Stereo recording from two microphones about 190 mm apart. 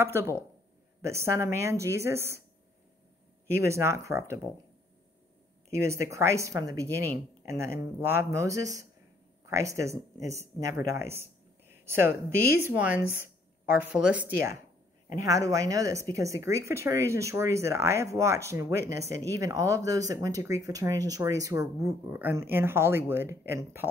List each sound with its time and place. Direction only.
0.0 s speech: 15° right (ahead or behind)
3.4 s speech: 15° right (ahead or behind)
5.7 s speech: 15° right (ahead or behind)